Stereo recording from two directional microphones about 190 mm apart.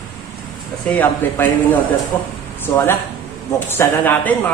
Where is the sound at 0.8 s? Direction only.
10° left (ahead or behind).